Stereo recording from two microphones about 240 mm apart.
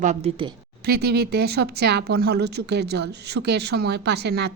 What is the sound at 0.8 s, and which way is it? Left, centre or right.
A woman's voice, right.